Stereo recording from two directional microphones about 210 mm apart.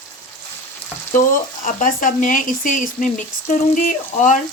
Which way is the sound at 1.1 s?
40° left (ahead or behind).